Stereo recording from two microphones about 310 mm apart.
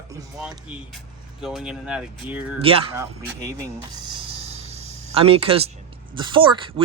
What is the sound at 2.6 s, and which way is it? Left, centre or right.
Speech, centre.